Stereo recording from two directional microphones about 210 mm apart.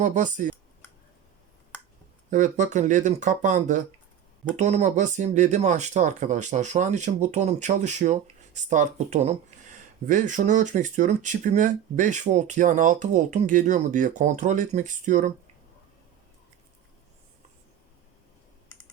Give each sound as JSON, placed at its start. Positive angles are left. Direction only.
{"t": 0.0, "sound": "speech", "side_deg": -35}
{"t": 2.3, "sound": "speech", "side_deg": -35}